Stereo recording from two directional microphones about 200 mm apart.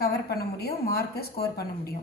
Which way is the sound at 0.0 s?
50° left (ahead or behind).